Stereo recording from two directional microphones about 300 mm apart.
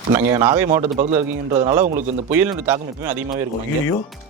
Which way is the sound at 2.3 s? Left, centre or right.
Centre.